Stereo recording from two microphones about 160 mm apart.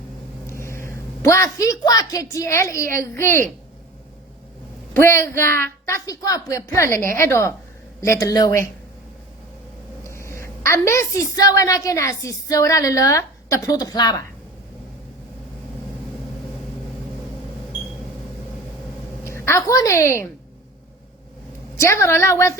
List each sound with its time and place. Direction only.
0.4 s a woman's voice: 15° left (ahead or behind)
4.9 s speech: 15° left (ahead or behind)
10.0 s a woman's voice: 15° left (ahead or behind)
19.2 s a woman's voice: 15° left (ahead or behind)
21.8 s speech: 15° left (ahead or behind)